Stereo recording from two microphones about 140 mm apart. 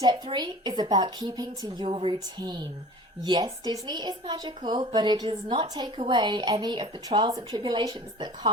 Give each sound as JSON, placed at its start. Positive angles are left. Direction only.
{"t": 0.0, "sound": "a woman's voice", "side_deg": -30}
{"t": 1.8, "sound": "a woman's voice", "side_deg": -40}